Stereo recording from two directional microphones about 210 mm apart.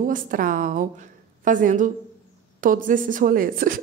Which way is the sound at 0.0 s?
40° right (ahead or behind).